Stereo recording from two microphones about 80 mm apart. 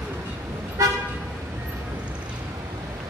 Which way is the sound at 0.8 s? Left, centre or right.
Right.